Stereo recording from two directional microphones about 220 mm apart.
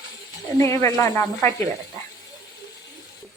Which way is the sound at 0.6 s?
15° left (ahead or behind).